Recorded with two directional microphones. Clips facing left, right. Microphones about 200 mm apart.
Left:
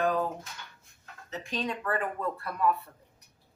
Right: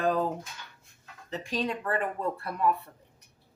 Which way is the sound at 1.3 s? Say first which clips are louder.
Right 2 dB; 30° right (ahead or behind).